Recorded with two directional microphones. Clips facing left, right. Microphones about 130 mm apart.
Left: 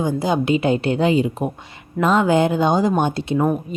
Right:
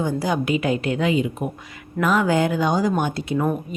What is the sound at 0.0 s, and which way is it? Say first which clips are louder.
Speech: left 3 dB; 20° left (ahead or behind).